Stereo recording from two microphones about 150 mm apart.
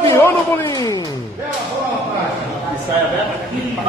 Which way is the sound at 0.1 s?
15° left (ahead or behind).